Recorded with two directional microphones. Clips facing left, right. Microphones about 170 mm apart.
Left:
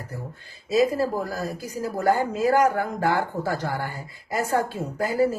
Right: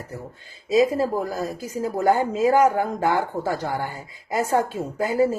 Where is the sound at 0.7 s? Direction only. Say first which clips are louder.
Right 2 dB; 20° right (ahead or behind).